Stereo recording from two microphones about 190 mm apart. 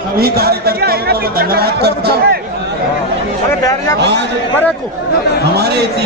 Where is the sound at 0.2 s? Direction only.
55° right (ahead or behind).